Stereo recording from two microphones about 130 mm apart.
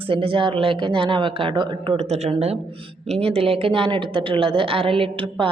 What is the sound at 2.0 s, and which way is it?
Speech, 55° right (ahead or behind).